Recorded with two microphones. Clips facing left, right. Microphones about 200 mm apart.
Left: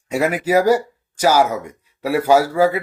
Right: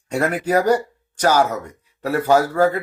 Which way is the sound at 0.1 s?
5° left (ahead or behind).